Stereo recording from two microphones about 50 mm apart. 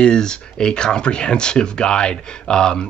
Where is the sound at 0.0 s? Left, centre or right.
Centre.